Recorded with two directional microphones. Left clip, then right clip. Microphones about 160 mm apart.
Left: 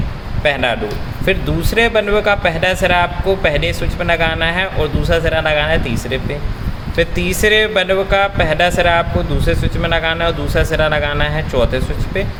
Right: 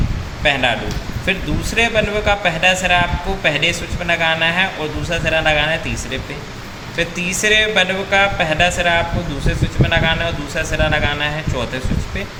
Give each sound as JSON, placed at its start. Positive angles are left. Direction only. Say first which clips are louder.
{"t": 0.4, "sound": "speech", "louder": "left 1 dB", "side_deg": 75}